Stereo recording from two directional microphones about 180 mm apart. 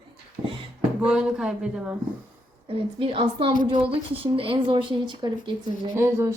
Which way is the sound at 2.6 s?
30° right (ahead or behind).